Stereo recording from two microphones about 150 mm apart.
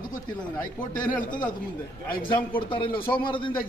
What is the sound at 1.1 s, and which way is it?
Speech, 65° left (ahead or behind).